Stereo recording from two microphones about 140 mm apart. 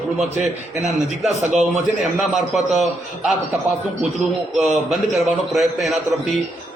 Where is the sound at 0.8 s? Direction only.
55° right (ahead or behind).